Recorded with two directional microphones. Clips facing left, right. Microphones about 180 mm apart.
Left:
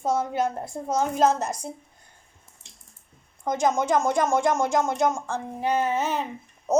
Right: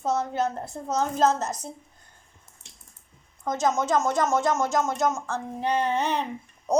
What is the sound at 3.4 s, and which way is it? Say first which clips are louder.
A woman's voice: left 1 dB; 15° left (ahead or behind).